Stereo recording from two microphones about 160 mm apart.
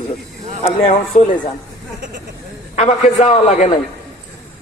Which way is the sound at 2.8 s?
40° left (ahead or behind).